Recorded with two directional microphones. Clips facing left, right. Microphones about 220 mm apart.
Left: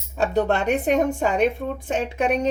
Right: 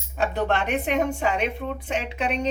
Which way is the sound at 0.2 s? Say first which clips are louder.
Left 3 dB; 45° left (ahead or behind).